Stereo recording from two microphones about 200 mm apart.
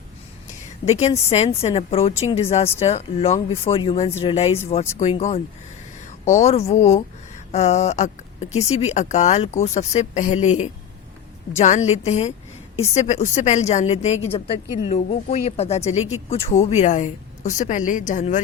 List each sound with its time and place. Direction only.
0.9 s a woman's voice: 30° left (ahead or behind)